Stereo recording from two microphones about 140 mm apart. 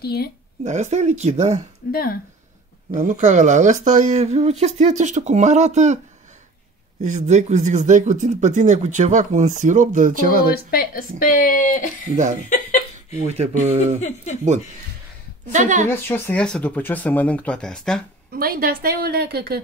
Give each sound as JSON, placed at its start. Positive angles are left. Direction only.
{"t": 0.7, "sound": "speech", "side_deg": -55}
{"t": 1.9, "sound": "speech", "side_deg": 90}
{"t": 2.9, "sound": "speech", "side_deg": -70}
{"t": 7.0, "sound": "speech", "side_deg": -60}
{"t": 10.5, "sound": "speech", "side_deg": 90}
{"t": 13.3, "sound": "speech", "side_deg": -50}
{"t": 14.0, "sound": "speech", "side_deg": 60}
{"t": 15.5, "sound": "speech", "side_deg": -60}
{"t": 15.9, "sound": "speech", "side_deg": 10}
{"t": 18.3, "sound": "a woman's voice", "side_deg": -90}